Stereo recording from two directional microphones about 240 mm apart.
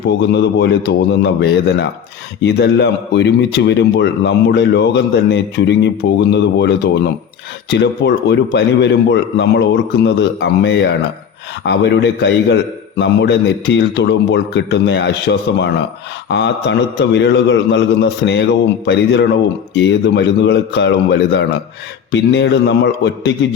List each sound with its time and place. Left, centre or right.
0.1 s a man's voice: left